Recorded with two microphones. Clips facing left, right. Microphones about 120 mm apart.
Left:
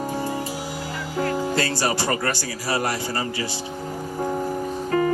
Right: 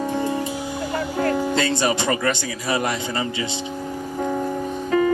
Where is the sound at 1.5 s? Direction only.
20° right (ahead or behind).